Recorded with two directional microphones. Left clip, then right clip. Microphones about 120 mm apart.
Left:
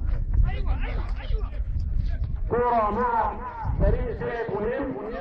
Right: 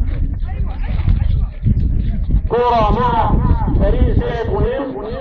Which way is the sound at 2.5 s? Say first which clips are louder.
Right 8 dB; 45° right (ahead or behind).